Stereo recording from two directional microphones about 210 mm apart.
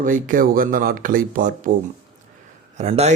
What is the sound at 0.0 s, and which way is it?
Speech, 40° right (ahead or behind).